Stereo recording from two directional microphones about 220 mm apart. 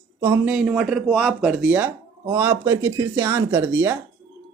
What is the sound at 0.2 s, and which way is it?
Speech, 5° right (ahead or behind).